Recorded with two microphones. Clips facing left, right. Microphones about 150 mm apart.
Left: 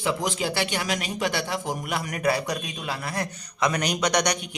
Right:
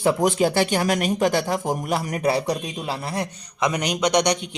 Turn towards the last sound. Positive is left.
turn(degrees=-25)  # may be behind; listen again after turning